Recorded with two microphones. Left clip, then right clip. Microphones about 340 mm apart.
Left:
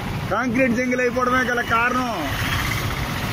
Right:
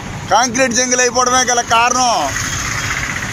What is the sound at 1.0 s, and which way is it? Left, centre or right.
A man's voice, centre.